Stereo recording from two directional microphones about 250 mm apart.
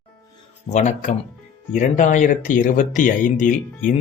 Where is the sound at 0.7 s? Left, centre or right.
Left.